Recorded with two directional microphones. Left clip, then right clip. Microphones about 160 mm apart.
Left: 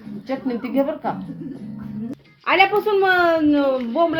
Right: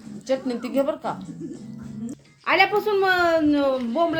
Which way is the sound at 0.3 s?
25° right (ahead or behind).